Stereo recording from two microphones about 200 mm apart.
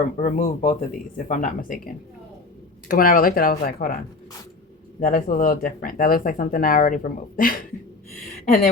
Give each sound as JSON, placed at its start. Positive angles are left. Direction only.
{"t": 0.2, "sound": "speech", "side_deg": 40}
{"t": 4.9, "sound": "speech", "side_deg": 45}